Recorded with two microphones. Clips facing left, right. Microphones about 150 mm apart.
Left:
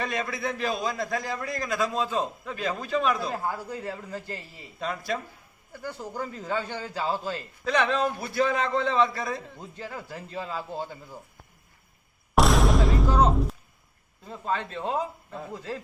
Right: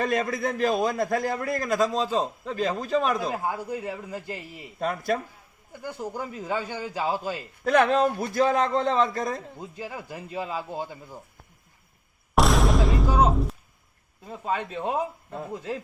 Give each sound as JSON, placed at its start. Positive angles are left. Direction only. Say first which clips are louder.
{"t": 0.0, "sound": "a man's voice", "louder": "right 5 dB", "side_deg": -45}
{"t": 3.3, "sound": "a man's voice", "louder": "right 2 dB", "side_deg": -15}
{"t": 4.8, "sound": "a man's voice", "louder": "right 4 dB", "side_deg": -50}
{"t": 5.7, "sound": "a man's voice", "louder": "right 2 dB", "side_deg": -15}
{"t": 7.6, "sound": "a man's voice", "louder": "right 5 dB", "side_deg": -55}
{"t": 9.6, "sound": "a man's voice", "louder": "right 2 dB", "side_deg": -10}
{"t": 12.3, "sound": "music", "louder": "even", "side_deg": 0}
{"t": 14.3, "sound": "a man's voice", "louder": "right 1 dB", "side_deg": -10}